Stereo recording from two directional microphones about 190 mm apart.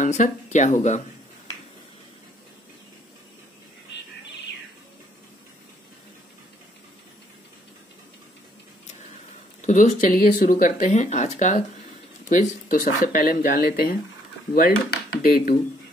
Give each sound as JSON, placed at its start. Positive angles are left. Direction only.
{"t": 0.0, "sound": "speech", "side_deg": 40}
{"t": 9.6, "sound": "speech", "side_deg": 40}